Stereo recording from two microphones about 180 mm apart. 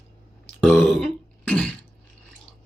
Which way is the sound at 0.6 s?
5° left (ahead or behind).